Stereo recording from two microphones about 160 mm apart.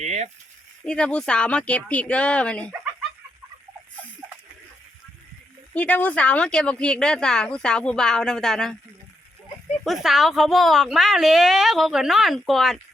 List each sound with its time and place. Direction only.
0.0 s speech: 45° right (ahead or behind)
0.9 s speech: 5° left (ahead or behind)
5.7 s speech: 10° left (ahead or behind)
9.8 s speech: centre (ahead or behind)